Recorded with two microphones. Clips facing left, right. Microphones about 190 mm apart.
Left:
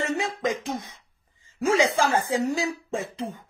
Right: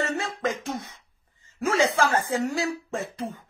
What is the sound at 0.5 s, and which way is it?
Speech, 10° left (ahead or behind).